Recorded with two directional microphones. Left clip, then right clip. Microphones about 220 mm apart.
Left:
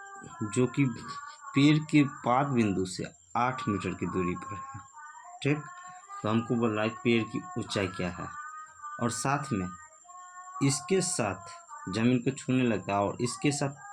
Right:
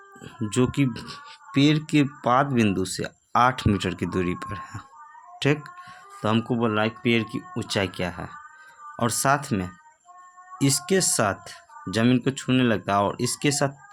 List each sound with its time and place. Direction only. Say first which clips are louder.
0.4 s speech: right 5 dB; 40° right (ahead or behind)
6.2 s speech: right 5 dB; 40° right (ahead or behind)